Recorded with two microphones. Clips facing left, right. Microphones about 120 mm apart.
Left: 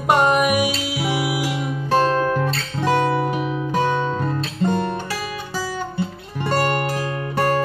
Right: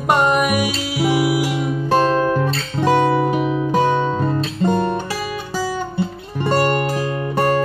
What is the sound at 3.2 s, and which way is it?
Music, 45° right (ahead or behind).